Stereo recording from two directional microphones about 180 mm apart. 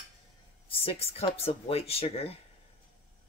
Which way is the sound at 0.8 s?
35° left (ahead or behind).